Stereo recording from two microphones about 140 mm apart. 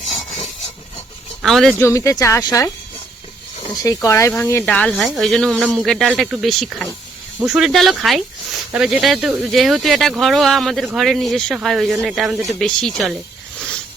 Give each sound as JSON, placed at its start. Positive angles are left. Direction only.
{"t": 0.1, "sound": "rub", "side_deg": 30}
{"t": 1.4, "sound": "speech", "side_deg": 0}
{"t": 1.8, "sound": "speech", "side_deg": 20}
{"t": 3.8, "sound": "speech", "side_deg": 25}